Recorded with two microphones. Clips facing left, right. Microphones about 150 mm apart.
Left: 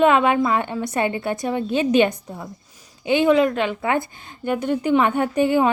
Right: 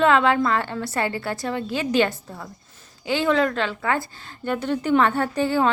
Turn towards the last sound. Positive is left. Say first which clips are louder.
# left 3 dB
turn(degrees=20)  # may be behind; listen again after turning